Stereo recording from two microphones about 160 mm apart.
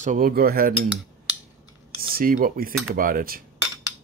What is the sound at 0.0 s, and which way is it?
Cutlery, 55° right (ahead or behind).